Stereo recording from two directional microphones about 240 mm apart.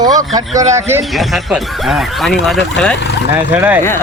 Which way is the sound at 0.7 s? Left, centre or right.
Centre.